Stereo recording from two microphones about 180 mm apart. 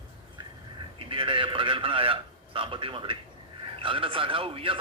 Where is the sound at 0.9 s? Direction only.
30° right (ahead or behind).